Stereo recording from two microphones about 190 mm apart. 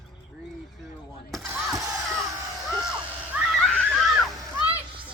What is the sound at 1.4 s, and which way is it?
Music, 15° right (ahead or behind).